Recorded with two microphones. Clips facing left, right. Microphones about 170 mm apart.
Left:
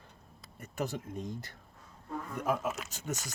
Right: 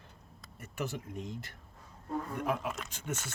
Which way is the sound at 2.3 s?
45° left (ahead or behind).